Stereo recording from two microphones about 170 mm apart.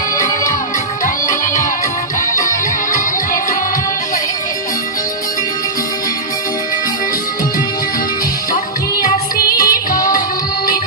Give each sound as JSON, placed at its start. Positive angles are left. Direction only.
{"t": 1.0, "sound": "music", "side_deg": 50}
{"t": 9.0, "sound": "music", "side_deg": 55}